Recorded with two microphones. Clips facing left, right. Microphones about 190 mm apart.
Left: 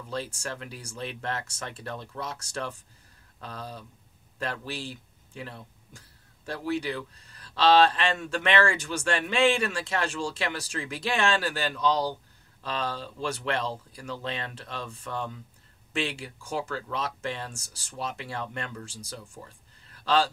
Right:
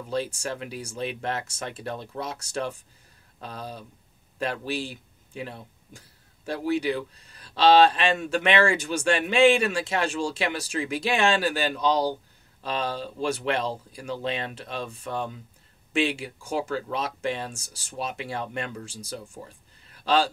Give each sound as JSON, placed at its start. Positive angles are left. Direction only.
{"t": 0.1, "sound": "speech", "side_deg": -15}